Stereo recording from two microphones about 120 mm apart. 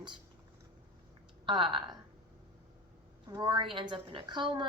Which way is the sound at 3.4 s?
45° right (ahead or behind).